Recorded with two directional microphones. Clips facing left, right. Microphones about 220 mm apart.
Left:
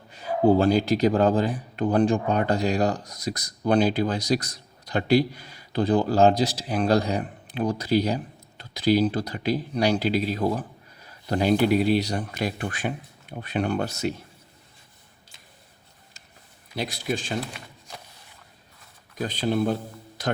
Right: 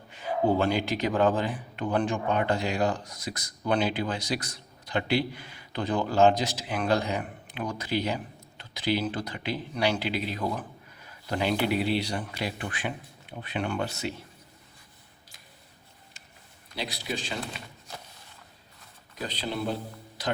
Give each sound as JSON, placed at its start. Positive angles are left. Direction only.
{"t": 0.1, "sound": "speech", "side_deg": 40}
{"t": 16.7, "sound": "speech", "side_deg": 50}
{"t": 19.2, "sound": "speech", "side_deg": 50}